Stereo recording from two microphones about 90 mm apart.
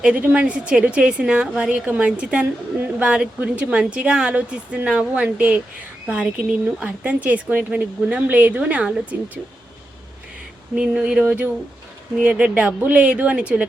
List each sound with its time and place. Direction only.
0.0 s speech: 15° right (ahead or behind)
10.8 s speech: 10° right (ahead or behind)